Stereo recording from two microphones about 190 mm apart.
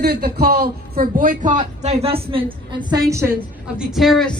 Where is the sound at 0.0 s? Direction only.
55° right (ahead or behind); by 2.1 s 35° right (ahead or behind).